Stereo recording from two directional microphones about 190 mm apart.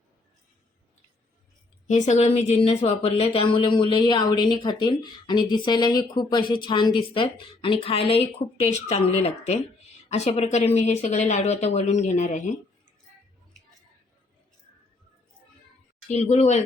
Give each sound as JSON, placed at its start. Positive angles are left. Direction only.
{"t": 1.9, "sound": "a woman's voice", "side_deg": 35}
{"t": 16.0, "sound": "speech", "side_deg": 35}